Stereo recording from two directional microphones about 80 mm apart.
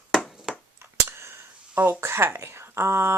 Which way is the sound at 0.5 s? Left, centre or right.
Centre.